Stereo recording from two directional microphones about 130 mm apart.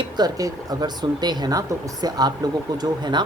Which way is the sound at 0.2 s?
30° right (ahead or behind).